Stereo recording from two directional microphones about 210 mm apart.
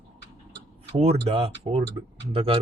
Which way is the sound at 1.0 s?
30° right (ahead or behind).